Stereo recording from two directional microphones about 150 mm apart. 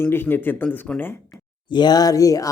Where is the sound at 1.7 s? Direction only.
30° left (ahead or behind).